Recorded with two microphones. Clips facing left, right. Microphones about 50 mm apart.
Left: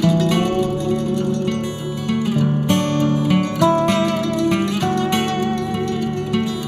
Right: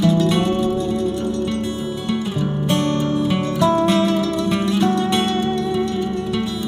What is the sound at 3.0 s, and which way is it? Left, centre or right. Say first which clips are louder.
Music: left 2 dB; left.